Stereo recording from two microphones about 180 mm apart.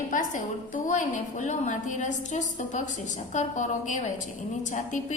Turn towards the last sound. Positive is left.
turn(degrees=45)  # may be behind; listen again after turning